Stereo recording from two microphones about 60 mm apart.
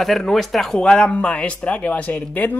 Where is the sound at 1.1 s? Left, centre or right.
Left.